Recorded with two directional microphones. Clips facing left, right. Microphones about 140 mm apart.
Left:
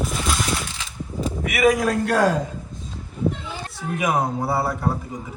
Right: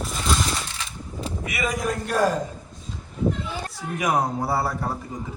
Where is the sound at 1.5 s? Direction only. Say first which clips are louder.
Left 8 dB; 80° left.